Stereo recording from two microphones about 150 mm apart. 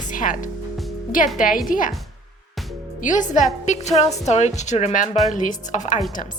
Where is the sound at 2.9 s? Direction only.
55° left (ahead or behind).